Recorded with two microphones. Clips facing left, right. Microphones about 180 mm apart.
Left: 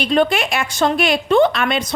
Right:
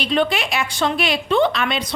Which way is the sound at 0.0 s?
45° left (ahead or behind).